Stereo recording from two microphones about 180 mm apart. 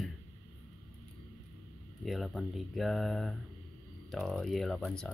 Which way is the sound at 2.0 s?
Centre (ahead or behind).